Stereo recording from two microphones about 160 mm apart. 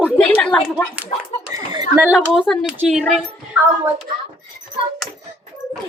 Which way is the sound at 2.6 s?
5° right (ahead or behind).